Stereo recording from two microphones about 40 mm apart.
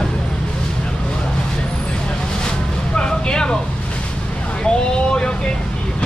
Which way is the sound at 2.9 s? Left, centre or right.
Left.